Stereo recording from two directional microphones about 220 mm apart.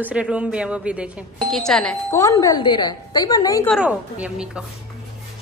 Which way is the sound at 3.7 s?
5° right (ahead or behind).